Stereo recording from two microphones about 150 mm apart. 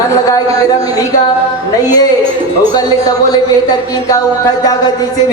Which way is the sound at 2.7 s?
25° left (ahead or behind).